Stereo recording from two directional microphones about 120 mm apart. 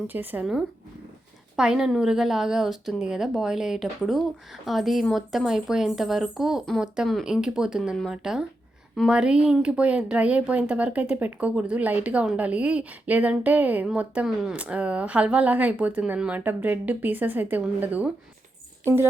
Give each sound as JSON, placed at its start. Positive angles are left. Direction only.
{"t": 0.1, "sound": "speech", "side_deg": -15}
{"t": 1.5, "sound": "speech", "side_deg": -5}